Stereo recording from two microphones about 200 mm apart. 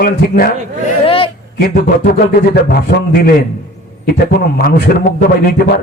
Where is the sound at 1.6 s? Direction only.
50° left (ahead or behind).